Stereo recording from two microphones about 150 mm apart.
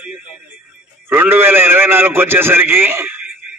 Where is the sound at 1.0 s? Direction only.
15° right (ahead or behind).